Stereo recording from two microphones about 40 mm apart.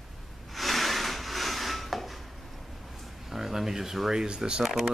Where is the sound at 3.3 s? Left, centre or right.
Centre.